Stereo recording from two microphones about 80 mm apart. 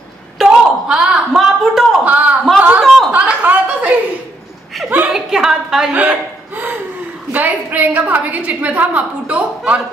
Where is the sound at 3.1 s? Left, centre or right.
Centre.